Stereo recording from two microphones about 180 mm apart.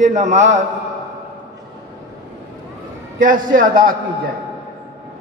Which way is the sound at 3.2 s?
50° right (ahead or behind).